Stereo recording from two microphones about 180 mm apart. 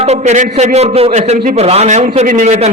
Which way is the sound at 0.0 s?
40° right (ahead or behind).